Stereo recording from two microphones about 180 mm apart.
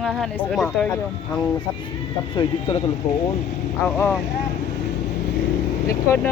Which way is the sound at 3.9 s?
10° left (ahead or behind).